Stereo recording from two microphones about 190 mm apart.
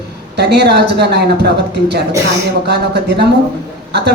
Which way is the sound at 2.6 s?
60° right (ahead or behind).